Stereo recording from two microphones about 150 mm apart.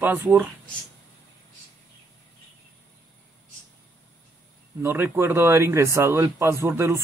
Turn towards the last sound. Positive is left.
turn(degrees=-20)  # may be behind; listen again after turning